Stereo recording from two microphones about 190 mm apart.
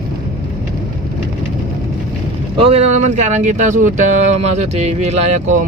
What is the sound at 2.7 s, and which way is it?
Speech, 35° right (ahead or behind).